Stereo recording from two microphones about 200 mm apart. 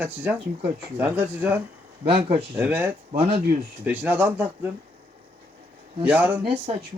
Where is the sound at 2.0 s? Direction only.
30° right (ahead or behind).